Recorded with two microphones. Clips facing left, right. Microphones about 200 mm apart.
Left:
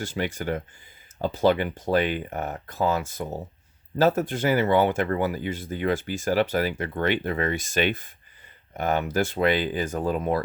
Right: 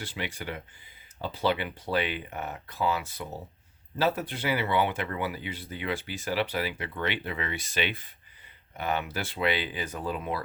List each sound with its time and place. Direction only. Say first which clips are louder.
0.0 s speech: left 7 dB; 45° left (ahead or behind)